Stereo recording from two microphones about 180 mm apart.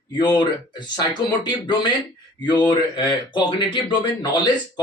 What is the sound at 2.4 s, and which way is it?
Speech, 25° left (ahead or behind).